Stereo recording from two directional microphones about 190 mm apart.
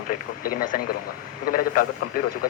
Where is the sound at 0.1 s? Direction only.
45° left (ahead or behind).